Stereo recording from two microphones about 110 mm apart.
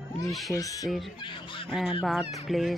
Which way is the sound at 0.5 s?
30° left (ahead or behind).